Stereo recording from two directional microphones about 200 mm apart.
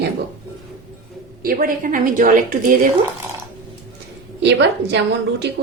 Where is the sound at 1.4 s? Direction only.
45° right (ahead or behind).